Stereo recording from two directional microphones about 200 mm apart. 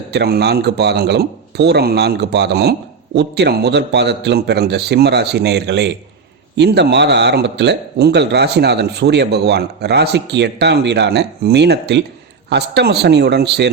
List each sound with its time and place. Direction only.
0.1 s speech: 55° right (ahead or behind)